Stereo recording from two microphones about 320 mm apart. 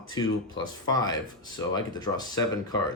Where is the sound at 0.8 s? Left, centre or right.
Centre.